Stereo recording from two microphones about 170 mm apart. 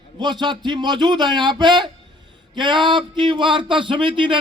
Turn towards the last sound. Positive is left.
turn(degrees=-30)  # may be behind; listen again after turning